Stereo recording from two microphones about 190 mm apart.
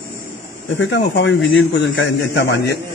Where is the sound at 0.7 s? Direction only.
70° left (ahead or behind).